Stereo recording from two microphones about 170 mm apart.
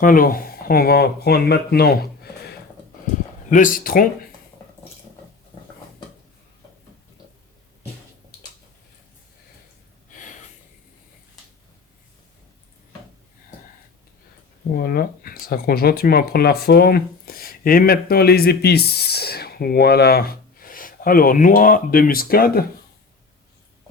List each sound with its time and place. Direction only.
0.0 s speech: 55° left (ahead or behind)
3.5 s speech: 50° left (ahead or behind)
14.7 s speech: 60° left (ahead or behind)